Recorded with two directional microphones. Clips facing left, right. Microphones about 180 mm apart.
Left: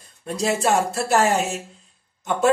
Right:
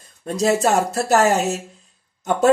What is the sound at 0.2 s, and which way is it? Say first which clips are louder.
Speech: right 4 dB; 40° right (ahead or behind).